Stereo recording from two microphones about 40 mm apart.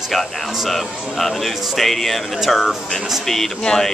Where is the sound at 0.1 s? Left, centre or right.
Centre.